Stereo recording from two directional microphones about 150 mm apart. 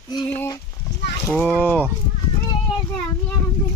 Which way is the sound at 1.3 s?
5° left (ahead or behind).